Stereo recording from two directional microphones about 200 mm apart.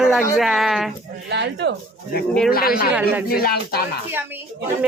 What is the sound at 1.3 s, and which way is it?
Speech, 60° right (ahead or behind).